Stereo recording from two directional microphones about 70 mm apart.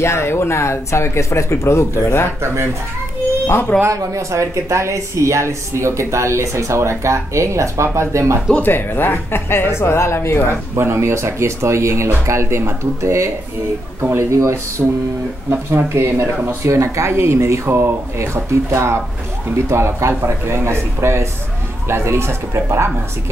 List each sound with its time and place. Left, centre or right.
0.0 s speech: left
2.4 s speech: right
3.9 s speech: right
8.5 s speech: left
10.8 s speech: right
15.9 s speech: right